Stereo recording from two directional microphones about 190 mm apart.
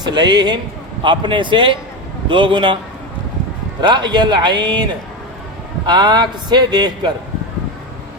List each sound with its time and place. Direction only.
0.0 s a man's voice: 25° right (ahead or behind)
3.8 s a man's voice: 25° right (ahead or behind)